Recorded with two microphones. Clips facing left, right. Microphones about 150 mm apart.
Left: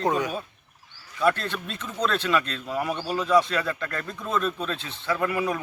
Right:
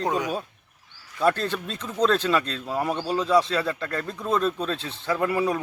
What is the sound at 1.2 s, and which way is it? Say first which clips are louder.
Speech: right 1 dB; 35° right (ahead or behind).